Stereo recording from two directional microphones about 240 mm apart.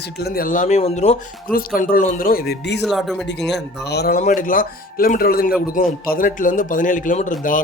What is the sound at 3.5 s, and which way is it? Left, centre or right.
Speech, left.